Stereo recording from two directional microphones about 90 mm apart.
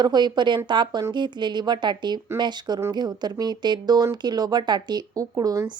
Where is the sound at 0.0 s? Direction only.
55° right (ahead or behind).